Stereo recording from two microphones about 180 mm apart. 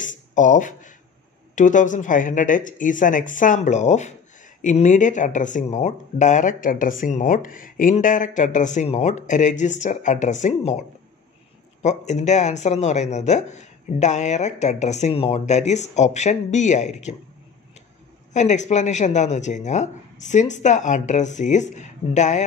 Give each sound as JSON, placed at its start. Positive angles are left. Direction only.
{"t": 0.0, "sound": "a sound", "side_deg": 45}
{"t": 1.5, "sound": "speech", "side_deg": 45}
{"t": 11.8, "sound": "speech", "side_deg": 40}
{"t": 18.3, "sound": "speech", "side_deg": 40}